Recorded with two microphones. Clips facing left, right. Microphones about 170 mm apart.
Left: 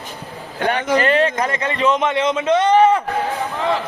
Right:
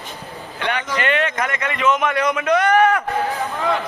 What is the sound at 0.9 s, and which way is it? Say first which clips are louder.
A man's voice: left 4 dB; 35° left (ahead or behind).